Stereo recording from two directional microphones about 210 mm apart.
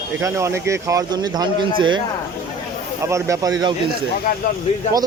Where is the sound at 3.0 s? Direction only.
15° right (ahead or behind).